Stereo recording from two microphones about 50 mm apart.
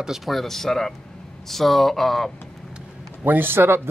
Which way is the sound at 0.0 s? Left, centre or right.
Centre.